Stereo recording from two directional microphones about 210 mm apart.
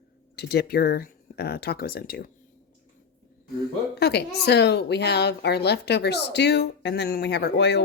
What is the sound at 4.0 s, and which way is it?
A woman's voice, 50° left (ahead or behind).